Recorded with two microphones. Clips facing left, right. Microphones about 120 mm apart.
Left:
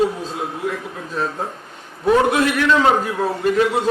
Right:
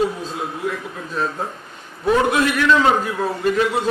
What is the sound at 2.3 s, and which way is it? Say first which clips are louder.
A man's voice: even; 45° left (ahead or behind).